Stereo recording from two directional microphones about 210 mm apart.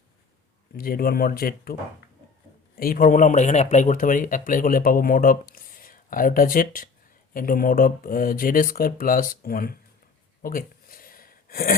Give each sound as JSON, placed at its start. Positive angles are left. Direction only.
{"t": 0.8, "sound": "speech", "side_deg": 45}
{"t": 2.7, "sound": "speech", "side_deg": 45}
{"t": 10.4, "sound": "a sound", "side_deg": 40}